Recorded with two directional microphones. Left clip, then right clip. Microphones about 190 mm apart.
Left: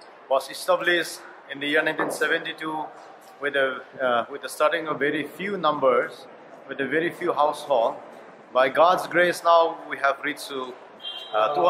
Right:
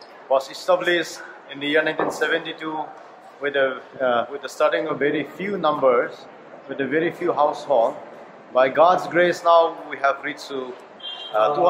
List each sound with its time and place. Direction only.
0.3 s speech: centre (ahead or behind)